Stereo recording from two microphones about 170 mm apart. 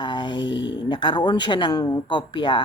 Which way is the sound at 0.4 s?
90° left.